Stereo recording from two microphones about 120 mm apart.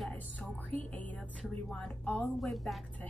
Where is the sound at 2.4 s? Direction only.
Centre (ahead or behind).